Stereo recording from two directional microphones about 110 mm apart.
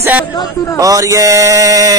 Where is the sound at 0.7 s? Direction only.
30° right (ahead or behind).